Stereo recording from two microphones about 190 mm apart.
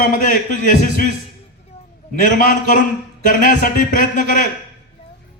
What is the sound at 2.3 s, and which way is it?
A man's voice, 45° left (ahead or behind).